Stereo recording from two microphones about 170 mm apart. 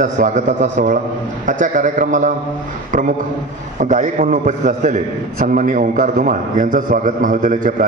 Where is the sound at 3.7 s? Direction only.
50° right (ahead or behind).